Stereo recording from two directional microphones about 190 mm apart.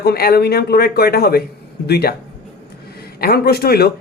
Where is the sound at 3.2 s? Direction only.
55° left (ahead or behind).